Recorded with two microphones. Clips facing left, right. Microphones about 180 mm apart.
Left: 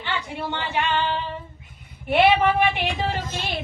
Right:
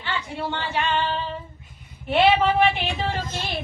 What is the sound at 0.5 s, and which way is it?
Child singing, 15° left (ahead or behind).